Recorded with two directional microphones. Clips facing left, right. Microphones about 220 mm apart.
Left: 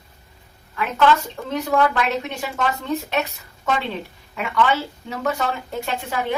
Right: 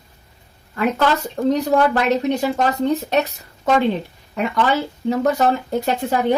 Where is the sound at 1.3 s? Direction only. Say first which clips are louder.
Right 5 dB; 40° right (ahead or behind).